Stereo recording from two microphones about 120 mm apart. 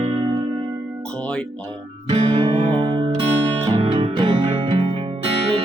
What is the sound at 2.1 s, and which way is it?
Music, 50° right (ahead or behind).